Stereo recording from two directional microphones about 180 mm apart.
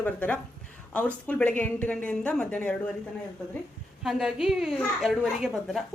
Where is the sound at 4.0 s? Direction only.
Centre (ahead or behind).